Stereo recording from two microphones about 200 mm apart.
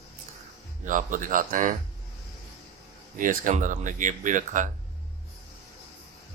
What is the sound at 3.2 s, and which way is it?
Speech, 40° right (ahead or behind).